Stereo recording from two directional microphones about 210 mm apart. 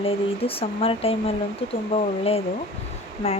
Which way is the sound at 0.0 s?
25° left (ahead or behind).